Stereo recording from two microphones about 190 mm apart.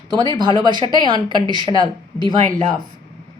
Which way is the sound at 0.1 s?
25° right (ahead or behind).